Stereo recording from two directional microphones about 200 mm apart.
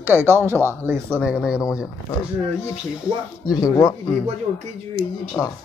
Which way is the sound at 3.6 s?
15° left (ahead or behind).